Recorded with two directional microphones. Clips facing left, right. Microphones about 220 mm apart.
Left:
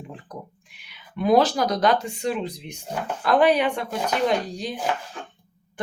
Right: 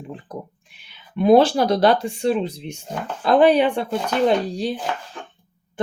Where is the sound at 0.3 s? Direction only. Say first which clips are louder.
Right 5 dB; 30° right (ahead or behind).